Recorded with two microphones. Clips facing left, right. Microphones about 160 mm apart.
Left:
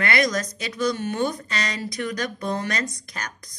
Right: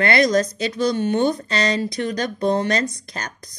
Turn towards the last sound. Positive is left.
turn(degrees=-30)  # may be behind; listen again after turning